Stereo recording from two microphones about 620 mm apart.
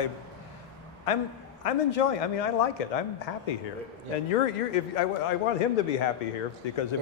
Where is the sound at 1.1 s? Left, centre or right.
Left.